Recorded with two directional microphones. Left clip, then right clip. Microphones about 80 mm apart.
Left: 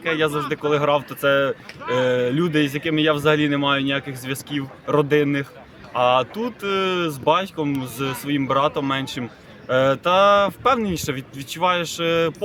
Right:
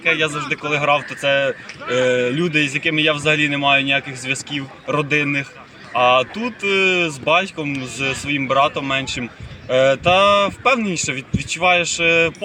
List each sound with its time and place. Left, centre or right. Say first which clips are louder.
0.0 s speech: right 3 dB; left